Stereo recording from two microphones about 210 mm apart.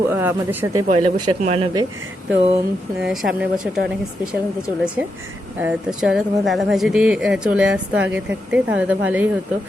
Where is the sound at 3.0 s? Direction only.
Centre (ahead or behind).